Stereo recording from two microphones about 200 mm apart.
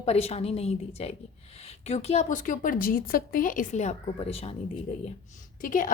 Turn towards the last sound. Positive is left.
turn(degrees=40)  # may be behind; listen again after turning